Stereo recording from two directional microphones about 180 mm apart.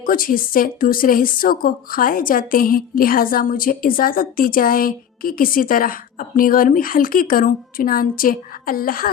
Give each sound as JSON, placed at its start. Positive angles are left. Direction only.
{"t": 0.0, "sound": "a woman's voice", "side_deg": 50}